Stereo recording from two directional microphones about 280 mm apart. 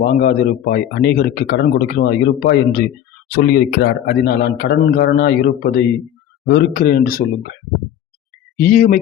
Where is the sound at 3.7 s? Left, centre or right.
Left.